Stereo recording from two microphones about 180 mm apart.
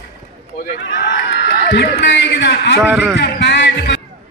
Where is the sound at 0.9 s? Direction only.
80° left.